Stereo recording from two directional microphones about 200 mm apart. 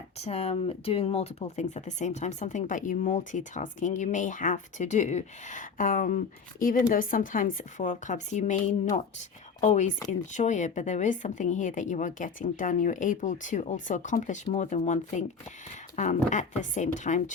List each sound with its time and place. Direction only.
0.2 s speech: 30° left (ahead or behind)
16.0 s speech: 40° left (ahead or behind)